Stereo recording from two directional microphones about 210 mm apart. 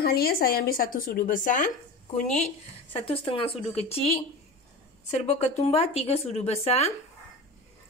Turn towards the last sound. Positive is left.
turn(degrees=30)  # may be behind; listen again after turning